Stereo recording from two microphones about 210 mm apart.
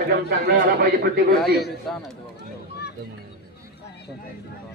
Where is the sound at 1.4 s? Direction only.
50° left (ahead or behind).